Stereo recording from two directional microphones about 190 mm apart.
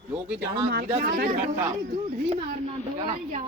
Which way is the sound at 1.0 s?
50° right (ahead or behind).